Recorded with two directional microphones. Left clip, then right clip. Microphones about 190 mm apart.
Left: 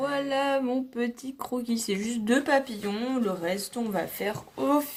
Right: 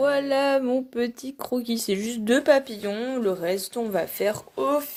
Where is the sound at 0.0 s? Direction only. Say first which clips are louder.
Right 6 dB; 35° right (ahead or behind); by 4.9 s 50° right (ahead or behind).